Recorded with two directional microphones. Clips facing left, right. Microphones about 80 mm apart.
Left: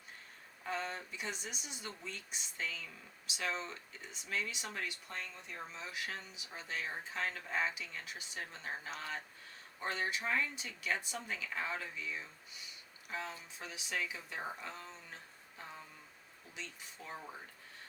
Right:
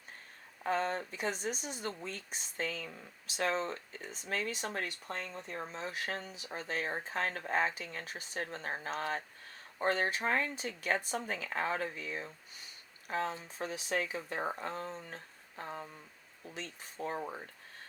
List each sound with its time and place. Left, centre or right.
0.6 s speech: right